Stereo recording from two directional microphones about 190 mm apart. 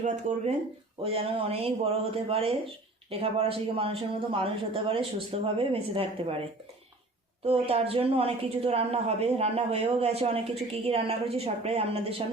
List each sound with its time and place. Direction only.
0.0 s a woman's voice: 35° right (ahead or behind)
7.4 s a woman's voice: 30° right (ahead or behind)